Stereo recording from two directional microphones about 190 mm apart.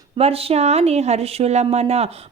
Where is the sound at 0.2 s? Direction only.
30° right (ahead or behind).